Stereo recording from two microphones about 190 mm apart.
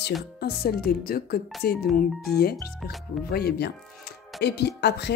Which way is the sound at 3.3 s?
55° left (ahead or behind).